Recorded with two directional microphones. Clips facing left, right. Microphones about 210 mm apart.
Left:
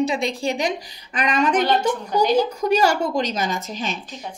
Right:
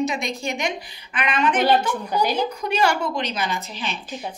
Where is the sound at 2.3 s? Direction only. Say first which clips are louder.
Left 4 dB; 40° left (ahead or behind).